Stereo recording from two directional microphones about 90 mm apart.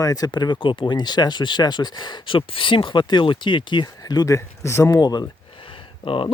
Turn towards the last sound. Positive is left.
turn(degrees=80)